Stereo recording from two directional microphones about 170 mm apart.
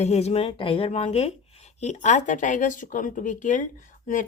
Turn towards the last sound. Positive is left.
turn(degrees=50)  # may be behind; listen again after turning